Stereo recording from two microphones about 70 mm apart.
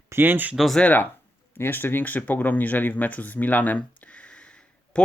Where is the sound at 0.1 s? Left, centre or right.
Right.